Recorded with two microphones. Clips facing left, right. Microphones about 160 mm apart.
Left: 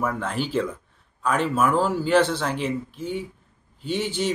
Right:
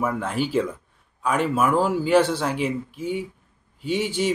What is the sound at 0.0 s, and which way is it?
A man's voice, 5° right (ahead or behind).